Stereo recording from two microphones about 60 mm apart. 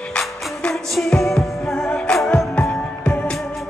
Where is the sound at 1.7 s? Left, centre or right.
Centre.